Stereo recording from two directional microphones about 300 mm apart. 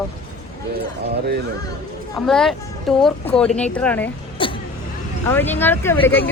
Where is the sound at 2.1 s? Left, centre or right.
Centre.